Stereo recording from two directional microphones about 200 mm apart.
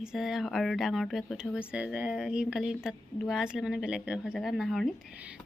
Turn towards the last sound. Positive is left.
turn(degrees=0)  # may be behind; listen again after turning